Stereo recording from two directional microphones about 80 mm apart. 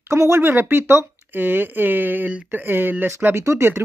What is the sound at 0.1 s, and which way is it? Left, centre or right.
Speech, right.